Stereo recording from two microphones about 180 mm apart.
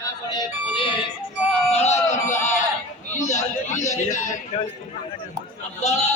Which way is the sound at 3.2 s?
40° left (ahead or behind).